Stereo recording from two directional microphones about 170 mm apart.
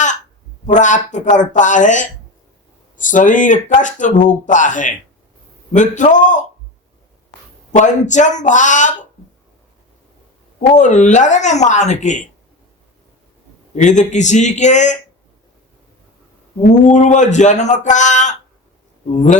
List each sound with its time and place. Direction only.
0.7 s speech: 45° left (ahead or behind)
7.7 s speech: 45° left (ahead or behind)
10.8 s speech: 45° left (ahead or behind)
13.7 s speech: 45° left (ahead or behind)
16.8 s speech: 45° left (ahead or behind)